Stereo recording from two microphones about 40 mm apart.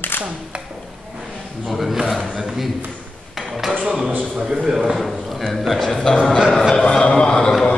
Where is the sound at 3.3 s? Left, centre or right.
Centre.